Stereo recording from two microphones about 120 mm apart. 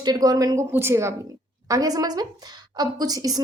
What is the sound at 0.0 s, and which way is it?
A woman's voice, 35° right (ahead or behind).